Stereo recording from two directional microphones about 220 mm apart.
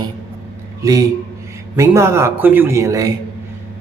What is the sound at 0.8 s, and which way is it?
A man's voice, 15° right (ahead or behind).